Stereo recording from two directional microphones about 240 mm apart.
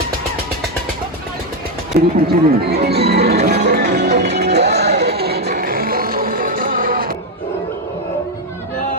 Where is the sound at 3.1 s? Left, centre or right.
Right.